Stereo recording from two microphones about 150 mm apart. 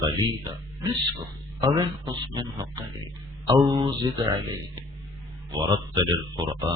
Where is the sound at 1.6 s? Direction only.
25° right (ahead or behind).